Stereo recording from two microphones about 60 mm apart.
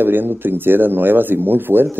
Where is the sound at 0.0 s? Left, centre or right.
Right.